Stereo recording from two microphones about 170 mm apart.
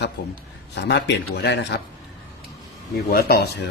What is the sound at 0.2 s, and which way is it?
Speech, 90° left.